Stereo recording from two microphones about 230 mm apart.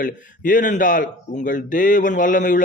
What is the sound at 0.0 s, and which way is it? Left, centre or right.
Speech, left.